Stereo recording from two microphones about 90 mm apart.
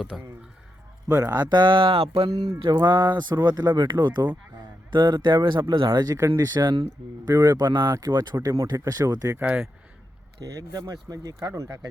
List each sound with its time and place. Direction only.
0.1 s speech: centre (ahead or behind)
1.0 s a man's voice: 30° right (ahead or behind)
1.3 s speech: 50° right (ahead or behind); by 2.3 s 80° right
2.3 s speech: 40° right (ahead or behind)
2.9 s speech: 25° right (ahead or behind)
3.2 s speech: 55° right (ahead or behind)
6.1 s speech: 30° right (ahead or behind); by 8.4 s 50° right (ahead or behind)
8.4 s speech: 40° right (ahead or behind)
9.3 s speech: 20° right (ahead or behind)
10.4 s speech: 40° right (ahead or behind)